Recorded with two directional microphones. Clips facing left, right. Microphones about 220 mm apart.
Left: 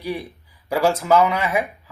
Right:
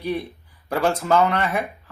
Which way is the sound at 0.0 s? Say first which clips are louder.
Right 2 dB; 10° left (ahead or behind).